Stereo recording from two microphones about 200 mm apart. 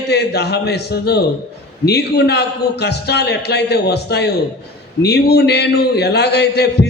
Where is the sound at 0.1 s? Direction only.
55° left (ahead or behind).